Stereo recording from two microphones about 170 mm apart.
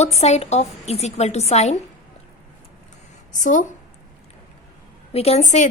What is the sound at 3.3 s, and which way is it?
Speech, 45° left (ahead or behind).